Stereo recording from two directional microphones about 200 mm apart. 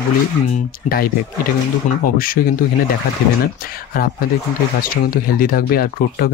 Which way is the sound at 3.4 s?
45° left (ahead or behind).